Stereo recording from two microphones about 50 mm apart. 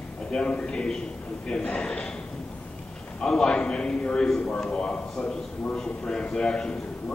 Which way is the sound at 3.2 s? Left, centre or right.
Centre.